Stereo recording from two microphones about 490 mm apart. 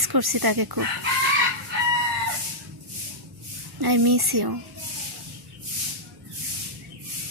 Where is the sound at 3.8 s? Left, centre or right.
Right.